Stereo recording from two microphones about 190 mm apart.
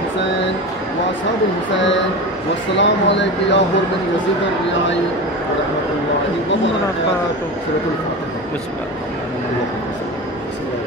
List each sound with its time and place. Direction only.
2.8 s speech: 70° left (ahead or behind)